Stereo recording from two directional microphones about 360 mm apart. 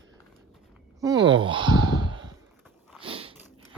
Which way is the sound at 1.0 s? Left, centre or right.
Centre.